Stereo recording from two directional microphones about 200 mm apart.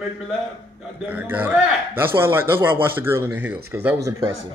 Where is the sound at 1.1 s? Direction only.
10° right (ahead or behind).